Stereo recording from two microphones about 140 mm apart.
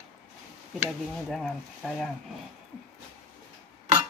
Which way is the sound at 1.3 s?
Centre (ahead or behind).